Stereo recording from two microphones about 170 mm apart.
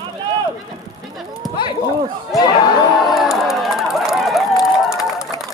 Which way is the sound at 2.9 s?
Centre (ahead or behind).